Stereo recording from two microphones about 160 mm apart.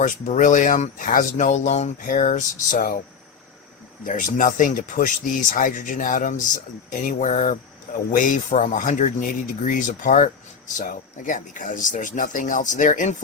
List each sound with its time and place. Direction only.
0.0 s speech: 55° left (ahead or behind)
4.0 s speech: 55° left (ahead or behind)